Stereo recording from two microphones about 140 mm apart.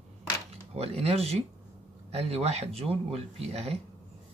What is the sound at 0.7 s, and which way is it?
Speech, 45° right (ahead or behind).